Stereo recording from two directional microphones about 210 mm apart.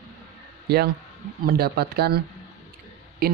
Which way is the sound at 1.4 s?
45° right (ahead or behind).